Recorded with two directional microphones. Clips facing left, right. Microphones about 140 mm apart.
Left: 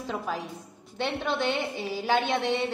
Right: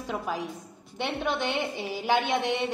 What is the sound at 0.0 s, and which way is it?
Speech, 10° right (ahead or behind).